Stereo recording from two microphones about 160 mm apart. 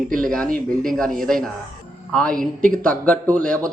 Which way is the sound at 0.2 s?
5° left (ahead or behind).